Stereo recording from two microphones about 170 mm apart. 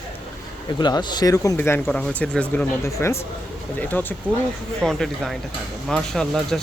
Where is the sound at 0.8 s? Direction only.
25° left (ahead or behind).